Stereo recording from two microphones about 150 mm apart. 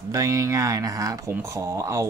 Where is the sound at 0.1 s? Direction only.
20° right (ahead or behind).